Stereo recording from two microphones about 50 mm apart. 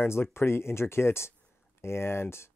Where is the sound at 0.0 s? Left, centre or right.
Left.